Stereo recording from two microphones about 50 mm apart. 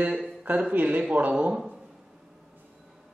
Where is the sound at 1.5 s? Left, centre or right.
Centre.